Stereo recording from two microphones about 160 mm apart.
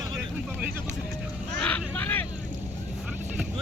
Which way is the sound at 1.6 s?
10° left (ahead or behind).